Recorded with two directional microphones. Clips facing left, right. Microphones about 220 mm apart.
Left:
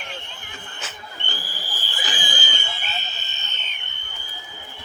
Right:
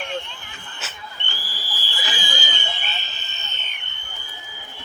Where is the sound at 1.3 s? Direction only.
50° left (ahead or behind).